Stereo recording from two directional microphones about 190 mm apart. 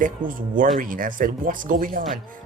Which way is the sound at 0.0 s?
45° right (ahead or behind).